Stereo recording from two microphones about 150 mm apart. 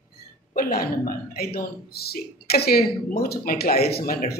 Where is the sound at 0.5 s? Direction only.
80° left.